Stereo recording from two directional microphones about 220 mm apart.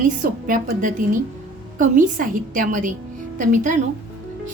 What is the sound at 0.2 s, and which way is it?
A woman's voice, 40° right (ahead or behind).